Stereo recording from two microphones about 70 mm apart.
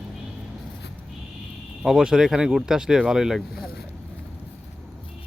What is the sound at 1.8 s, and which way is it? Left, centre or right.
Speech, centre.